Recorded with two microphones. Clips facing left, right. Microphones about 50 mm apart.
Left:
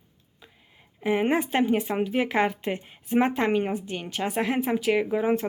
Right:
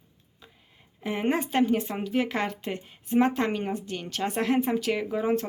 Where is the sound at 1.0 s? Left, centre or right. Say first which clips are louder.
Left 4 dB; centre.